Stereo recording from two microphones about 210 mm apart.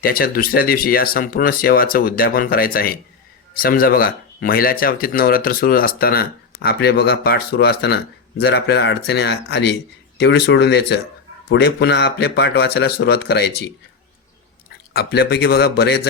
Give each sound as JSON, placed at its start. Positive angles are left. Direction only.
{"t": 0.0, "sound": "speech", "side_deg": 45}
{"t": 14.9, "sound": "speech", "side_deg": 50}